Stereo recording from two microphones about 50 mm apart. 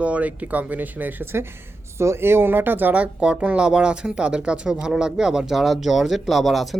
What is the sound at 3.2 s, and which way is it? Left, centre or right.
Speech, right.